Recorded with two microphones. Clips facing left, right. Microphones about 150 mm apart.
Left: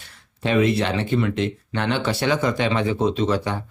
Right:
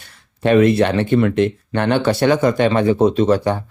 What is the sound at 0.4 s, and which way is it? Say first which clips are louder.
Speech: right 7 dB; 55° right (ahead or behind).